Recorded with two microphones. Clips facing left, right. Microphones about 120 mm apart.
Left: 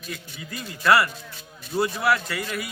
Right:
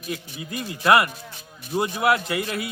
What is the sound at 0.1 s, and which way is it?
A man's voice, 20° right (ahead or behind).